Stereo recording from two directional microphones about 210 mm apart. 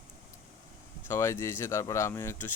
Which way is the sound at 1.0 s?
15° left (ahead or behind).